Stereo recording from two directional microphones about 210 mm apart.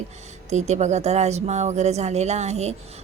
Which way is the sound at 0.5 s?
35° right (ahead or behind).